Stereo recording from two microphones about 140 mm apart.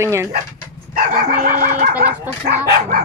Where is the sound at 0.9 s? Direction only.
85° right.